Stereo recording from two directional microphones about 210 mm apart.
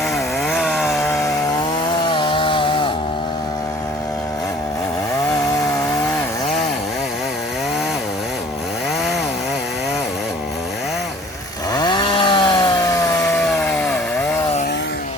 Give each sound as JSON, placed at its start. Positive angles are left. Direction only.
{"t": 0.4, "sound": "chainsaw", "side_deg": 0}
{"t": 2.0, "sound": "chainsaw", "side_deg": 25}
{"t": 11.7, "sound": "chainsaw", "side_deg": 20}
{"t": 13.3, "sound": "chainsaw", "side_deg": 0}